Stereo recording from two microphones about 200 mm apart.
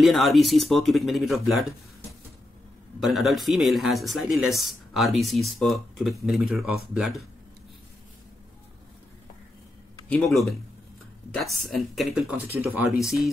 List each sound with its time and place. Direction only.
0.0 s speech: centre (ahead or behind)
3.0 s speech: centre (ahead or behind)
10.0 s speech: 5° left (ahead or behind)